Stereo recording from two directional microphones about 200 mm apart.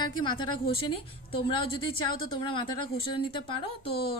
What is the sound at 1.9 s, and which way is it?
Speech, 25° left (ahead or behind).